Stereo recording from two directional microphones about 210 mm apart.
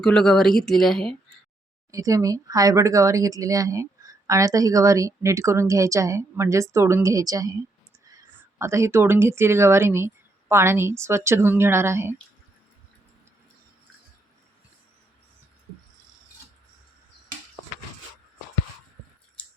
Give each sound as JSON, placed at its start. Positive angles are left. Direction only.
{"t": 0.0, "sound": "speech", "side_deg": 5}
{"t": 1.9, "sound": "speech", "side_deg": -15}